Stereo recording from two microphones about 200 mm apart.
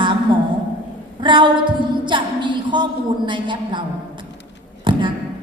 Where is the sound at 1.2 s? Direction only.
25° right (ahead or behind).